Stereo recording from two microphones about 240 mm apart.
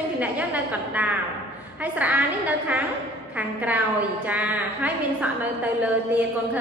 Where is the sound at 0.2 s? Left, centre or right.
Centre.